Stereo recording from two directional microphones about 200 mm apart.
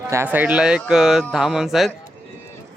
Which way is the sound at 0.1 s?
10° right (ahead or behind).